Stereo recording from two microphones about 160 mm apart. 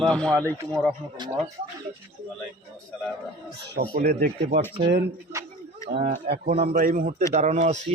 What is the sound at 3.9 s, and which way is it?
Speech, 65° right (ahead or behind).